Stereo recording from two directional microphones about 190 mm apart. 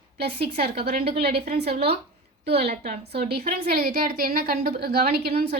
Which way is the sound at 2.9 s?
55° right (ahead or behind).